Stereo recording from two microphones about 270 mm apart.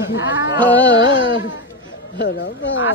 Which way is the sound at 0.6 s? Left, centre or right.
Centre.